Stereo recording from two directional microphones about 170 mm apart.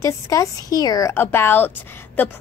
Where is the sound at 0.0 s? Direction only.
20° left (ahead or behind).